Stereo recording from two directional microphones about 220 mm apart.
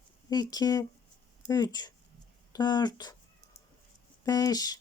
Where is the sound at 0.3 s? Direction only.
15° left (ahead or behind).